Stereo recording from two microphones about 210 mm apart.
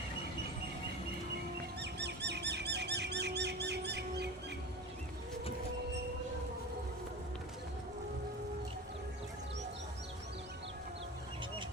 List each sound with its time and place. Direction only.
1.8 s bird: 55° right (ahead or behind)